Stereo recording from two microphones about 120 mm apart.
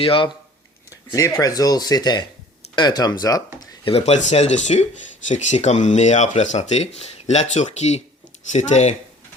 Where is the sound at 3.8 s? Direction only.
60° left (ahead or behind).